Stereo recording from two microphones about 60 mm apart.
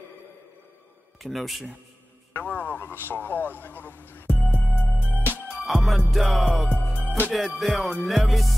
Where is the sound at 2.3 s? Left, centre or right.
Left.